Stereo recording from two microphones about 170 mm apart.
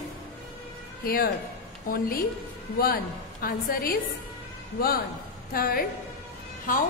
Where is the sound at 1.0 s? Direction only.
60° left (ahead or behind).